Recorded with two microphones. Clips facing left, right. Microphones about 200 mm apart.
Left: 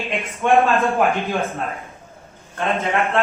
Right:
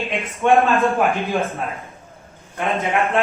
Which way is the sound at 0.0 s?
Centre (ahead or behind).